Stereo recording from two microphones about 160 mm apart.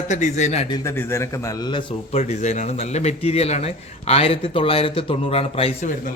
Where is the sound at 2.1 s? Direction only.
45° left (ahead or behind).